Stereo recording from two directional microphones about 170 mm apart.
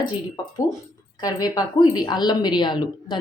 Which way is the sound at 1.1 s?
25° left (ahead or behind).